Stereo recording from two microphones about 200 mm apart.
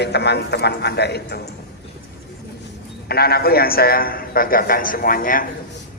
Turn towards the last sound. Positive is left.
turn(degrees=45)  # may be behind; listen again after turning